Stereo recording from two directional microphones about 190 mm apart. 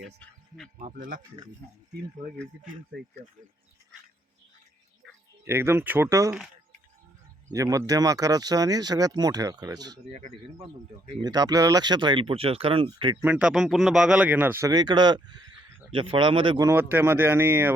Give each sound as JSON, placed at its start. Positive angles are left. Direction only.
{"t": 0.0, "sound": "music", "side_deg": 0}
{"t": 0.8, "sound": "speech", "side_deg": -40}
{"t": 5.5, "sound": "speech", "side_deg": -15}
{"t": 7.5, "sound": "speech", "side_deg": -15}
{"t": 10.1, "sound": "speech", "side_deg": -35}
{"t": 11.2, "sound": "speech", "side_deg": -20}
{"t": 13.2, "sound": "speech", "side_deg": -5}
{"t": 16.6, "sound": "speech", "side_deg": -10}